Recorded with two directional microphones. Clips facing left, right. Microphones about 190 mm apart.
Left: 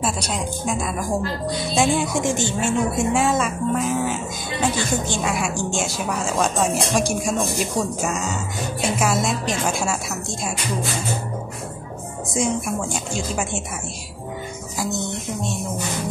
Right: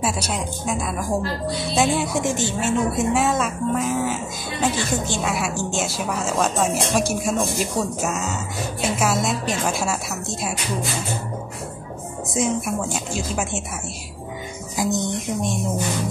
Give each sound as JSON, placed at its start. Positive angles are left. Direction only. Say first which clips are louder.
{"t": 0.0, "sound": "a woman's voice", "louder": "even", "side_deg": -5}
{"t": 12.4, "sound": "a woman's voice", "louder": "even", "side_deg": -5}
{"t": 14.8, "sound": "speech", "louder": "right 4 dB", "side_deg": -15}